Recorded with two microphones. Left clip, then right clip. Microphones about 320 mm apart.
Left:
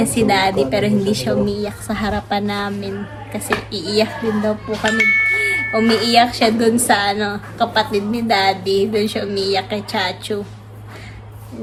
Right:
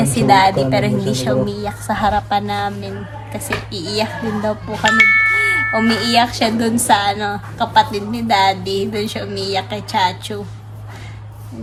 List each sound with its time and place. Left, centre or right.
0.2 s a woman's voice: centre
4.8 s speech: right
5.9 s a woman's voice: centre